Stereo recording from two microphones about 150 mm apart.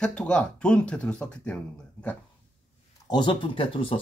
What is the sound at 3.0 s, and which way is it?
Speech, 30° left (ahead or behind).